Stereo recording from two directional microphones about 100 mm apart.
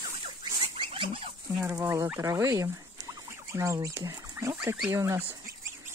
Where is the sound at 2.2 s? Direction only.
30° right (ahead or behind).